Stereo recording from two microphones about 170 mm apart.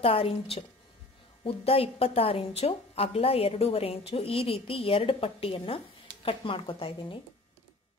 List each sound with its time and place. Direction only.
0.0 s a woman's voice: 35° left (ahead or behind)